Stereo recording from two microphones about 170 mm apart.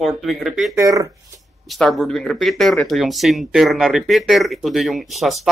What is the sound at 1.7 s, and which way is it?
Speech, centre (ahead or behind).